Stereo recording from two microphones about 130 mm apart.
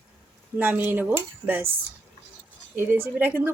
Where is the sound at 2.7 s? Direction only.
15° right (ahead or behind).